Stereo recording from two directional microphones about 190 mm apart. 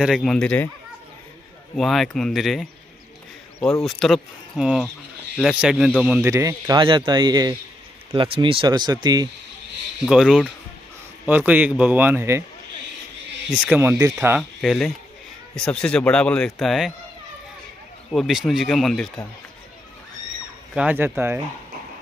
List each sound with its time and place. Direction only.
0.0 s speech: centre (ahead or behind)
1.8 s speech: centre (ahead or behind)
3.8 s speech: centre (ahead or behind); by 9.3 s 20° right (ahead or behind)
10.0 s speech: centre (ahead or behind)
13.5 s speech: 10° right (ahead or behind)
14.6 s speech: centre (ahead or behind)
18.1 s speech: centre (ahead or behind)
20.7 s speech: 10° right (ahead or behind)